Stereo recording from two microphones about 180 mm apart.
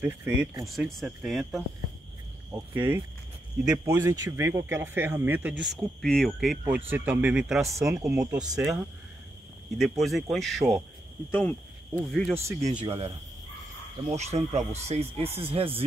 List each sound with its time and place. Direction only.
0.0 s speech: 10° right (ahead or behind)
2.5 s speech: 15° right (ahead or behind); by 12.4 s 5° left (ahead or behind)
12.4 s speech: 15° right (ahead or behind)
12.8 s speech: 35° right (ahead or behind)
14.1 s speech: 40° right (ahead or behind)